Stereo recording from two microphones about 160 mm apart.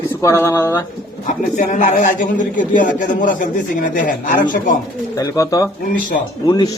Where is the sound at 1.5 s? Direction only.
55° left (ahead or behind).